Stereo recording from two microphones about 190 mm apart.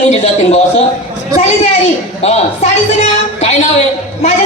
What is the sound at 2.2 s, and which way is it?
A man's voice, 35° left (ahead or behind).